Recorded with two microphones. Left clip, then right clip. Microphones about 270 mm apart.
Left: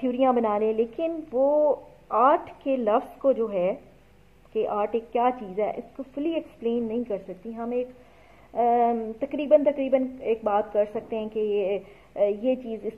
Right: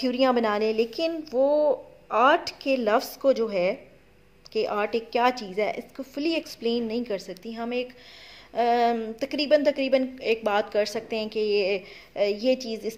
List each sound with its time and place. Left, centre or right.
0.0 s a woman's voice: right